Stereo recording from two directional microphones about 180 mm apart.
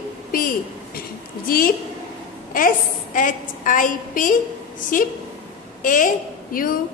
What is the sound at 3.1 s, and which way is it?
A woman's voice, 50° left (ahead or behind).